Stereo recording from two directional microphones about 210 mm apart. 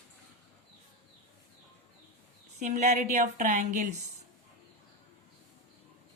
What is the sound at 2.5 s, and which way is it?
Speech, 35° right (ahead or behind).